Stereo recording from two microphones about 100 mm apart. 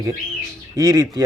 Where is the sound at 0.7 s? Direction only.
40° right (ahead or behind).